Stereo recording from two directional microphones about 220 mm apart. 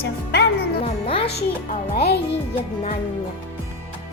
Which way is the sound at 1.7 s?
45° left (ahead or behind).